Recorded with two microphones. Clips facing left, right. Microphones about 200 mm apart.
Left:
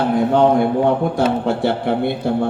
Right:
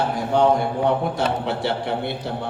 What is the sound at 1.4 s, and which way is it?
Speech, 55° left (ahead or behind).